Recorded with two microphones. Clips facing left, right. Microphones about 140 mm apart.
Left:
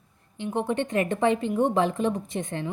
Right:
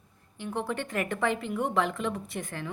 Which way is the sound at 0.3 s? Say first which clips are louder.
Left 6 dB; 20° left (ahead or behind).